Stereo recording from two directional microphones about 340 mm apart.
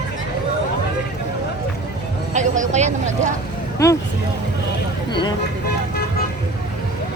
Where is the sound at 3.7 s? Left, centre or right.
Centre.